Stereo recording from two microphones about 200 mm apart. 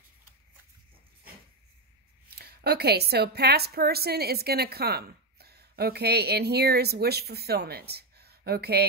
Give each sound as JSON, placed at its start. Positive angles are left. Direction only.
{"t": 2.2, "sound": "a woman's voice", "side_deg": -50}